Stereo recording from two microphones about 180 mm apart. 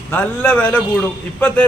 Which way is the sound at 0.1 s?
10° left (ahead or behind).